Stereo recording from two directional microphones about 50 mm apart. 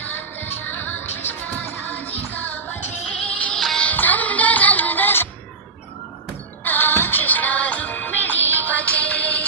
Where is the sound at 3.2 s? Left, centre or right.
Left.